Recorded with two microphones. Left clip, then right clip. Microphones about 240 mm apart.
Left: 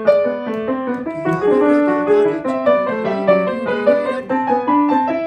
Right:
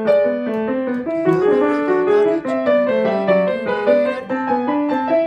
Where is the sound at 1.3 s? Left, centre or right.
Centre.